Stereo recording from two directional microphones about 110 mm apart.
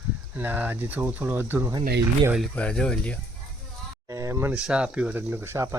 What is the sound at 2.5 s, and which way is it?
Speech, 10° left (ahead or behind).